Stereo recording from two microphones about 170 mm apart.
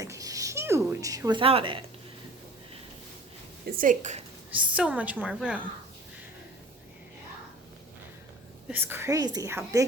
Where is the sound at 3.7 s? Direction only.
50° right (ahead or behind).